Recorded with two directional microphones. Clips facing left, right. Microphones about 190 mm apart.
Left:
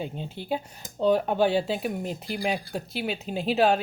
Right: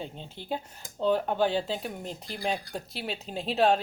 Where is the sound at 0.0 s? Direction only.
10° left (ahead or behind).